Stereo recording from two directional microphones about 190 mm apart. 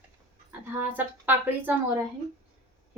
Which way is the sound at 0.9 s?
10° right (ahead or behind).